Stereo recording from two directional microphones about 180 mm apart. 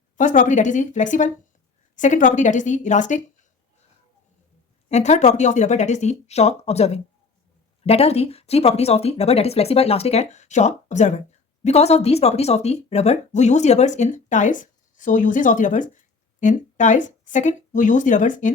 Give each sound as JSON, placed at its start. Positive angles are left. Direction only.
{"t": 0.2, "sound": "speech", "side_deg": 45}
{"t": 4.9, "sound": "speech", "side_deg": 40}